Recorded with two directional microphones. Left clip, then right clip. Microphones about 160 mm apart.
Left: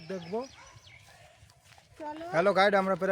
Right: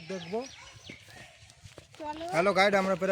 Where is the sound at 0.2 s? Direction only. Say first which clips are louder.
Even; 10° left (ahead or behind).